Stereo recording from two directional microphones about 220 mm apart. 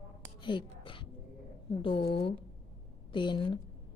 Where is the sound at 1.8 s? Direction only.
25° left (ahead or behind).